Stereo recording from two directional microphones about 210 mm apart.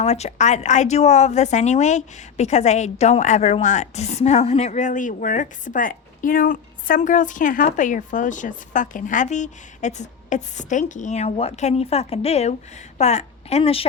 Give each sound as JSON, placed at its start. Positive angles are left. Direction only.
{"t": 0.0, "sound": "a woman's voice", "side_deg": 30}